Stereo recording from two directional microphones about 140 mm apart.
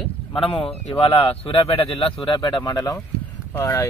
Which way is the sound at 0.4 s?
40° left (ahead or behind).